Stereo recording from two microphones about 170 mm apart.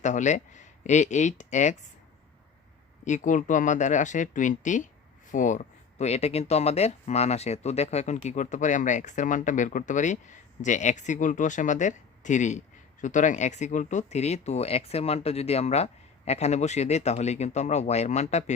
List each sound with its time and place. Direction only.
0.0 s speech: 45° left (ahead or behind)
3.0 s speech: 45° left (ahead or behind)